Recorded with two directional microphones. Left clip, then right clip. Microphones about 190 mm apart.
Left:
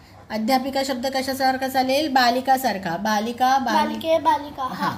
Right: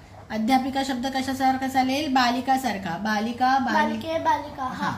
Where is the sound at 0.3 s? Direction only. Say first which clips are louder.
Left 1 dB; 25° left (ahead or behind).